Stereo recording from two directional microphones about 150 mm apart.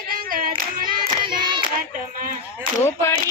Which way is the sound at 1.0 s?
30° right (ahead or behind).